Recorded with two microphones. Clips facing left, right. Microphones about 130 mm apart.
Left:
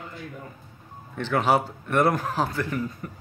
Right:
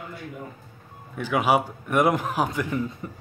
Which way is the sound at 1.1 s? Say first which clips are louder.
Even; 10° right (ahead or behind).